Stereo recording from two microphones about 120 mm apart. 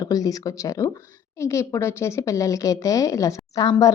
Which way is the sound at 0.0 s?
30° left (ahead or behind).